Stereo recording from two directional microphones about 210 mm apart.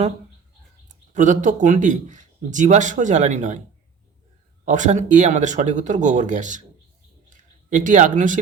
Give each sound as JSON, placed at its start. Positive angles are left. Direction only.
{"t": 1.1, "sound": "a man's voice", "side_deg": -35}
{"t": 4.6, "sound": "a man's voice", "side_deg": -35}
{"t": 7.3, "sound": "a sound", "side_deg": -35}